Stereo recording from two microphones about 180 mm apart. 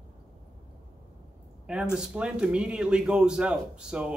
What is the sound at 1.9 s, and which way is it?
A man's voice, 5° right (ahead or behind).